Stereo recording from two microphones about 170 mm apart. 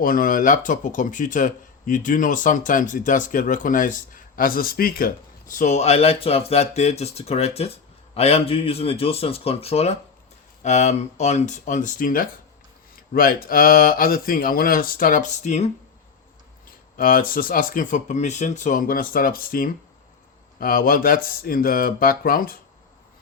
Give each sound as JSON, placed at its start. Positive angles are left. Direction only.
{"t": 0.0, "sound": "speech", "side_deg": 55}
{"t": 17.0, "sound": "speech", "side_deg": 55}